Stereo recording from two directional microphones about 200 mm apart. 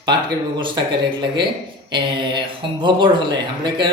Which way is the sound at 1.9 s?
25° right (ahead or behind).